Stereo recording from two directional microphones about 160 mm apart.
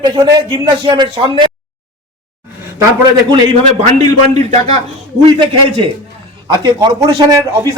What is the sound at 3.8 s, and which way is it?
Speech, 45° right (ahead or behind).